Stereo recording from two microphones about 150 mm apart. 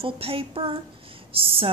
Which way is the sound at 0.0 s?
40° right (ahead or behind).